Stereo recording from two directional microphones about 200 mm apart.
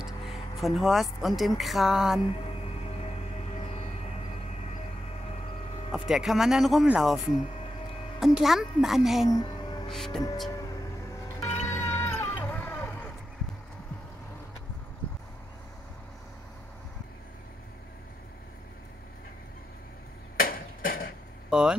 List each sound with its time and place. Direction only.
0.0 s a sound: centre (ahead or behind)
1.6 s speech: centre (ahead or behind)
5.9 s speech: 5° right (ahead or behind)
9.3 s music: 20° left (ahead or behind)
9.8 s speech: centre (ahead or behind)
11.3 s music: 10° left (ahead or behind)
20.3 s a sound: 45° left (ahead or behind)
21.5 s vehicle: 5° right (ahead or behind)